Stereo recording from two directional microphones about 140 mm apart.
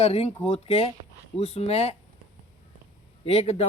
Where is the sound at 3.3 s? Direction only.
45° left (ahead or behind).